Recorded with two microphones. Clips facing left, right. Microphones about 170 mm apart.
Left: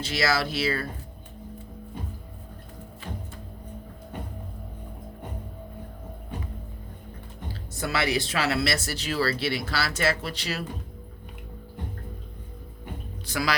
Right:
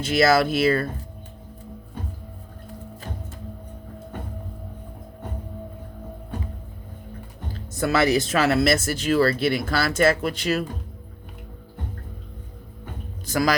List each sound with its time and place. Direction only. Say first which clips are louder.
0.0 s speech: right 8 dB; 50° right (ahead or behind)
7.8 s speech: right 7 dB; 45° right (ahead or behind)
13.2 s speech: right 6 dB; 45° right (ahead or behind)